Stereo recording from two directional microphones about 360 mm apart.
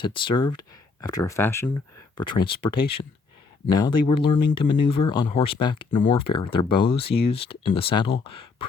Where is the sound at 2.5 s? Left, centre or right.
Left.